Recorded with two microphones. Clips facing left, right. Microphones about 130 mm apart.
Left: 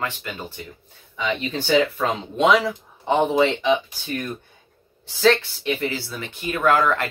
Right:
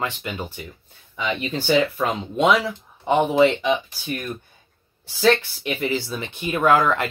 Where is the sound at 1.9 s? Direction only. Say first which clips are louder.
Even; 15° right (ahead or behind).